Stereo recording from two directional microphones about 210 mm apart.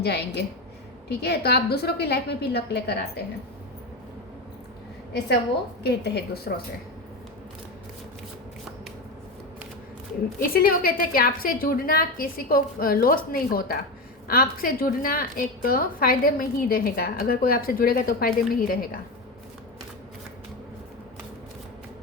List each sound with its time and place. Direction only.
0.0 s a woman's voice: 50° left (ahead or behind)
5.8 s a woman's voice: 50° left (ahead or behind)
10.5 s a woman's voice: 45° left (ahead or behind)